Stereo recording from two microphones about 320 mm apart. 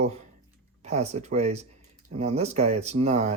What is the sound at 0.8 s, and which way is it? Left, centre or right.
Speech, right.